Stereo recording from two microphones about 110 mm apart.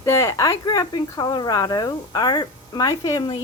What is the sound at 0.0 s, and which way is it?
Speech, 25° left (ahead or behind).